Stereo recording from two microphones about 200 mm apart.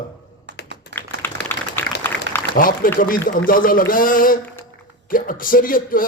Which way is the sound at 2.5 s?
45° left (ahead or behind).